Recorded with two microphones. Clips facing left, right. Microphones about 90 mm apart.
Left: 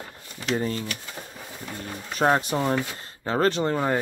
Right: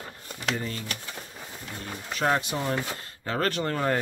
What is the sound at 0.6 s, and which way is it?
Speech, 35° left (ahead or behind).